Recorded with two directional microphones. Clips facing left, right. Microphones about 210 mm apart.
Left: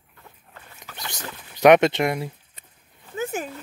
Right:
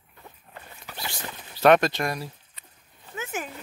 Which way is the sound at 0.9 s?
15° right (ahead or behind).